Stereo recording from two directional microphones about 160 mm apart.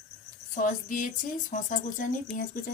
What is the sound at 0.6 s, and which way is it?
Speech, 55° left (ahead or behind).